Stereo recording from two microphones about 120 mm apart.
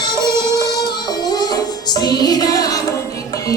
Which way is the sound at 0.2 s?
25° right (ahead or behind).